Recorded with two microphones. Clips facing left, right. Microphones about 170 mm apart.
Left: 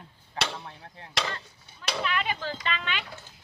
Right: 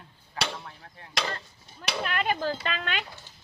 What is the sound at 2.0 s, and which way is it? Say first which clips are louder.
Speech: right 3 dB; 45° right (ahead or behind).